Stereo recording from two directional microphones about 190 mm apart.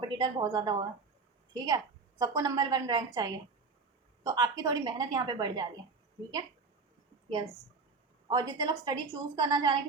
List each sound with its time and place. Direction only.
0.0 s a woman's voice: 20° right (ahead or behind)
8.3 s a woman's voice: 20° right (ahead or behind)